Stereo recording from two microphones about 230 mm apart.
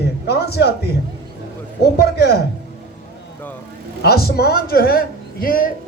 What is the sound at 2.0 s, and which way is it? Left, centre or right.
Speech, left.